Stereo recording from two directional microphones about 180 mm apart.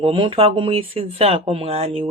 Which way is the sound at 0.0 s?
30° right (ahead or behind).